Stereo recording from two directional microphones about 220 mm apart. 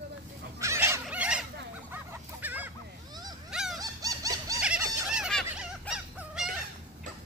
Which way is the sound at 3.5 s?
Centre (ahead or behind).